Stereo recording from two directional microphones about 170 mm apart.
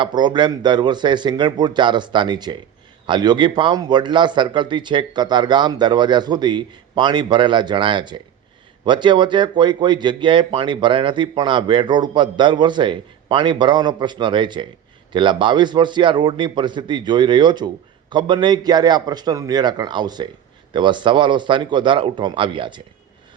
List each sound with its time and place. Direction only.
0.0 s speech: 25° right (ahead or behind)